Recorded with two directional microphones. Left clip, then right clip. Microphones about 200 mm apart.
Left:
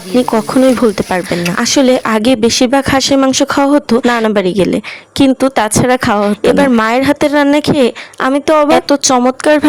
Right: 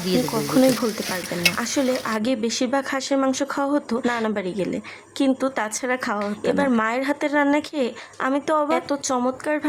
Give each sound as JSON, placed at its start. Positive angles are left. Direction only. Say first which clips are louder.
{"t": 0.5, "sound": "speech", "louder": "left 9 dB", "side_deg": 35}